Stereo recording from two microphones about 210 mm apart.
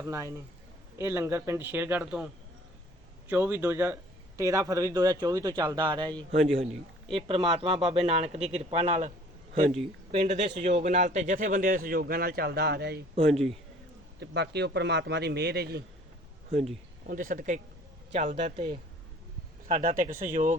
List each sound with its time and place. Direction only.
0.0 s speech: 15° right (ahead or behind)
3.2 s speech: 10° right (ahead or behind)
6.1 s a man's voice: centre (ahead or behind)
7.1 s a man's voice: 25° right (ahead or behind); by 13.0 s 50° right (ahead or behind)
14.2 s a man's voice: 50° right (ahead or behind)
17.1 s speech: 40° right (ahead or behind)
19.6 s speech: 40° right (ahead or behind)